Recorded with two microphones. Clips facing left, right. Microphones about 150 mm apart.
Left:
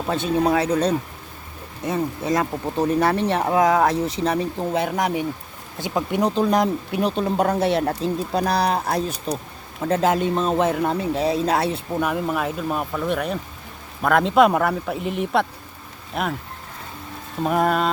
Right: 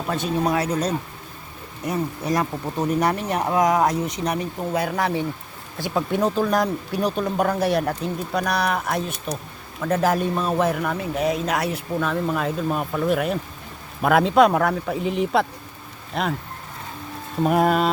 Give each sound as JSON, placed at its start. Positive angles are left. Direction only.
{"t": 0.1, "sound": "speech", "side_deg": 25}
{"t": 1.8, "sound": "speech", "side_deg": 25}
{"t": 11.9, "sound": "speech", "side_deg": 15}
{"t": 17.4, "sound": "speech", "side_deg": -5}